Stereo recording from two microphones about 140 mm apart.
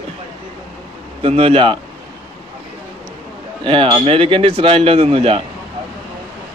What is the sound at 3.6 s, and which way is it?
Speech, 40° right (ahead or behind).